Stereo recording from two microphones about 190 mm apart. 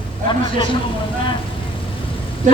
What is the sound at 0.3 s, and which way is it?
Speech, 25° left (ahead or behind).